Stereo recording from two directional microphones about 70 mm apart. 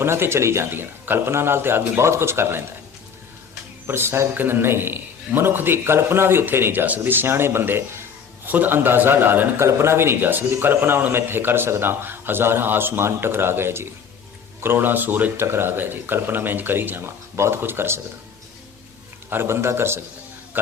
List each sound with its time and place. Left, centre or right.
0.0 s a man's voice: right
0.7 s a man's voice: right
3.8 s a man's voice: right
19.3 s a man's voice: right